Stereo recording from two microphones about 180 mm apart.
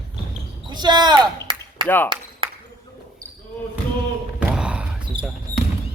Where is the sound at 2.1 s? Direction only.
30° right (ahead or behind).